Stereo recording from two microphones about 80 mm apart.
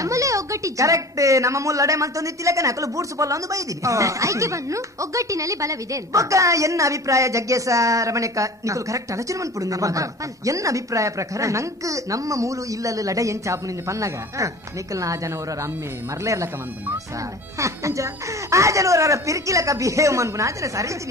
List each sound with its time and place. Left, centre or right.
0.0 s a woman's voice: right
17.6 s speech: right